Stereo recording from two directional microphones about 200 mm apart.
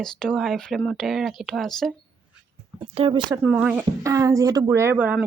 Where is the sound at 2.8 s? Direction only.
25° right (ahead or behind).